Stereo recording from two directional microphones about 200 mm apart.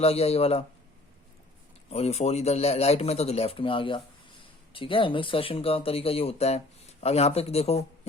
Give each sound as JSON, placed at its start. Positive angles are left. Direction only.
{"t": 0.0, "sound": "speech", "side_deg": 30}
{"t": 1.9, "sound": "speech", "side_deg": 30}